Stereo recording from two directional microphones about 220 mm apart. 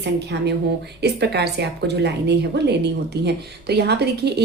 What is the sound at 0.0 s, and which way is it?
Speech, 50° right (ahead or behind).